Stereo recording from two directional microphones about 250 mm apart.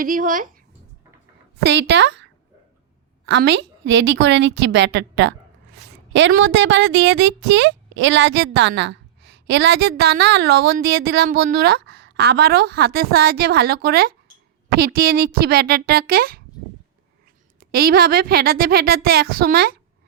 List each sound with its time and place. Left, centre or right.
0.0 s a woman's voice: right
17.6 s a woman's voice: right